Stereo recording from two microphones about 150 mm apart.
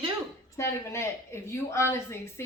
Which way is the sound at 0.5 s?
20° left (ahead or behind).